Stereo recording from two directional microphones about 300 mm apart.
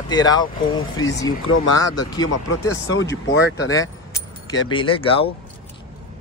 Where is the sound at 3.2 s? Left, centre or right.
Left.